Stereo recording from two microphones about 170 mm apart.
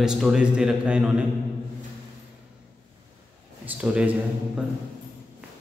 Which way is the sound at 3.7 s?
5° right (ahead or behind).